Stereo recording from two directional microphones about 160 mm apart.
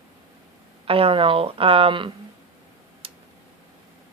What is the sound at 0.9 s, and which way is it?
A woman's voice, 35° right (ahead or behind).